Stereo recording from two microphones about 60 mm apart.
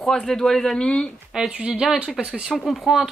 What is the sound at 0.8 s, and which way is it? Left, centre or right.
Speech, centre.